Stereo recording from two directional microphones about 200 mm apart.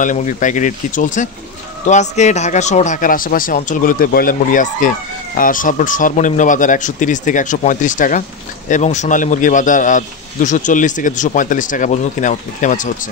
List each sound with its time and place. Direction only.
0.0 s a man's voice: 40° left (ahead or behind)